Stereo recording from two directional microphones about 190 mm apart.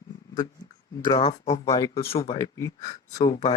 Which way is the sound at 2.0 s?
30° left (ahead or behind).